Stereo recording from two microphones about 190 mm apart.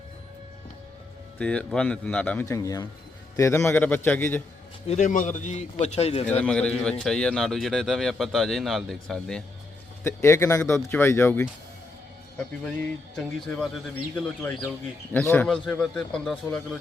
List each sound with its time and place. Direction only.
1.4 s speech: 5° left (ahead or behind)
4.9 s a man's voice: 40° left (ahead or behind)
6.4 s speech: 5° left (ahead or behind)
10.0 s speech: 15° left (ahead or behind)
13.1 s speech: 5° left (ahead or behind)